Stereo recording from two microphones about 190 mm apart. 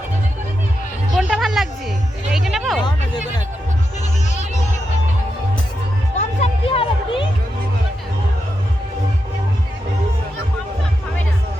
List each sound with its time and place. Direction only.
1.1 s music: centre (ahead or behind)
6.1 s music: 30° left (ahead or behind)